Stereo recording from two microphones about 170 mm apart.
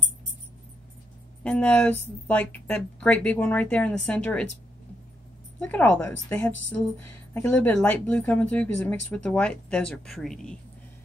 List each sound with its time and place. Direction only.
1.4 s speech: 5° left (ahead or behind)
5.6 s speech: 10° left (ahead or behind)